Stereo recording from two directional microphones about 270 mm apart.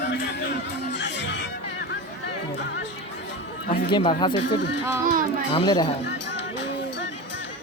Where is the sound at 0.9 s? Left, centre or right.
Left.